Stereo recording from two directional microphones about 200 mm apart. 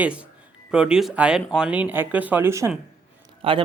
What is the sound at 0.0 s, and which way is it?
Speech, 5° right (ahead or behind).